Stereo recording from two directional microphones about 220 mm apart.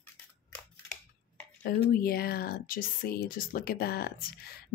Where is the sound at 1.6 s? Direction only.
40° left (ahead or behind).